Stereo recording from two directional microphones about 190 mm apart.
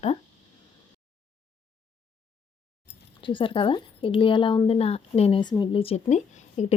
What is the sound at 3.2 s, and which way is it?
A woman's voice, 25° left (ahead or behind).